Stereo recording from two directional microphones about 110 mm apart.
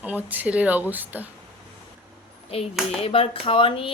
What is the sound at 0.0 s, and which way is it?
Speech, 15° right (ahead or behind).